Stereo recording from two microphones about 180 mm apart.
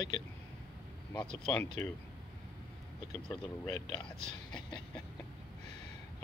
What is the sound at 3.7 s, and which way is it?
Speech, 25° left (ahead or behind).